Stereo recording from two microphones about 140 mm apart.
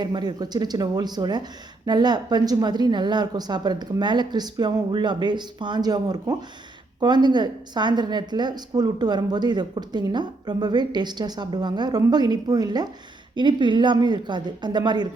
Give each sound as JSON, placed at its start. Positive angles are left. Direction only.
{"t": 0.0, "sound": "a woman's voice", "side_deg": -30}